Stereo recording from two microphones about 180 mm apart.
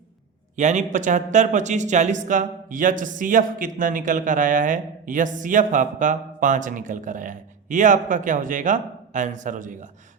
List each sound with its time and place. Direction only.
0.5 s speech: 40° right (ahead or behind)